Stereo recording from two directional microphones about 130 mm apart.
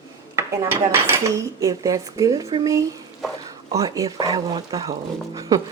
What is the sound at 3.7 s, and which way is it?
Speech, 25° right (ahead or behind).